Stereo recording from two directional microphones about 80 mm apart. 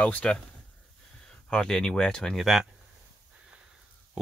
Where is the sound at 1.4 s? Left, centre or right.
Centre.